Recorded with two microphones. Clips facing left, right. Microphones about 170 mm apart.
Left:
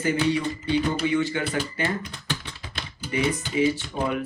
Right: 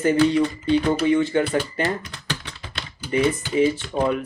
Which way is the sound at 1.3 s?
35° right (ahead or behind).